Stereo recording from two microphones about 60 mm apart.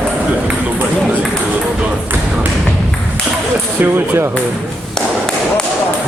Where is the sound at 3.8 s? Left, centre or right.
Right.